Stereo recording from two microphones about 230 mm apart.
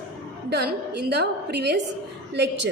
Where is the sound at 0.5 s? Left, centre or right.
Right.